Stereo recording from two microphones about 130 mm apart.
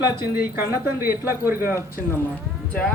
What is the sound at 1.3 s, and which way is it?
Speech, 15° right (ahead or behind).